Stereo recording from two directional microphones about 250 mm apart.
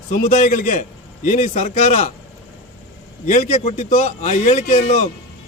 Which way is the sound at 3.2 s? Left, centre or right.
Left.